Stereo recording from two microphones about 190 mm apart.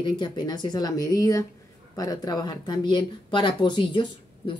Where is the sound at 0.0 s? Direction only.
25° left (ahead or behind).